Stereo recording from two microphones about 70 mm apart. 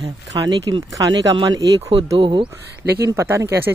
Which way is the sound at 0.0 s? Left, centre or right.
Right.